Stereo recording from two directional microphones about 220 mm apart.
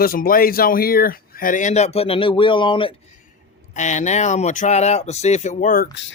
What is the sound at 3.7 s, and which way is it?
Speech, 35° left (ahead or behind).